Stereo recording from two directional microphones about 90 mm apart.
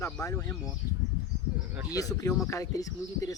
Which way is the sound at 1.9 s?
40° left (ahead or behind).